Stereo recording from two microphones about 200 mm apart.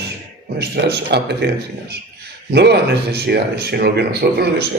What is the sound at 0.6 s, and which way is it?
Speech, 55° right (ahead or behind).